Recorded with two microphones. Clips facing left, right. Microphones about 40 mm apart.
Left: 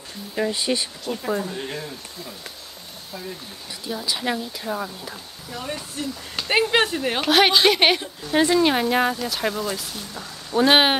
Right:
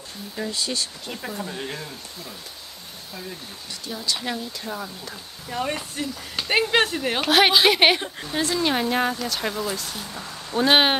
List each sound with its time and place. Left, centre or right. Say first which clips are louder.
0.4 s speech: left 5 dB; left
1.1 s speech: left 6 dB; centre
3.9 s speech: left 3 dB; centre
5.5 s speech: right 4 dB; right
6.3 s speech: left 1 dB; centre
8.3 s speech: left 6 dB; left; by 11.0 s centre